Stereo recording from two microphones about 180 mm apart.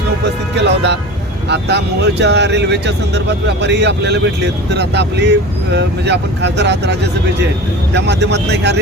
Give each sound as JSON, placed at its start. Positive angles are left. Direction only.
{"t": 0.5, "sound": "speech", "side_deg": -75}
{"t": 7.9, "sound": "speech", "side_deg": -70}